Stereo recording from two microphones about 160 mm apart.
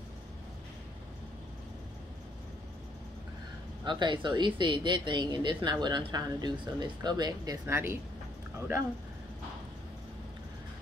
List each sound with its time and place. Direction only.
3.8 s speech: 30° right (ahead or behind)
7.6 s speech: 15° right (ahead or behind)